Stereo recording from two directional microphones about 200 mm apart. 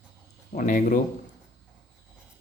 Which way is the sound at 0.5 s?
40° left (ahead or behind).